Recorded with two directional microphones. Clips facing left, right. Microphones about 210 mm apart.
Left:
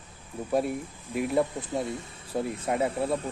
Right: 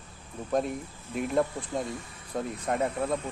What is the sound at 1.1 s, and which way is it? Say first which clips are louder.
Speech: left 1 dB; 5° left (ahead or behind).